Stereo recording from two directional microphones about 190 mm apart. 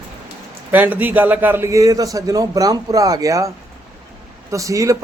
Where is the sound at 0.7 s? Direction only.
10° right (ahead or behind).